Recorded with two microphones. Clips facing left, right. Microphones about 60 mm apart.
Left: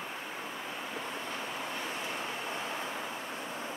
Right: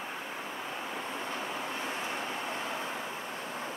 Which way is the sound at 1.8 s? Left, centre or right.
Right.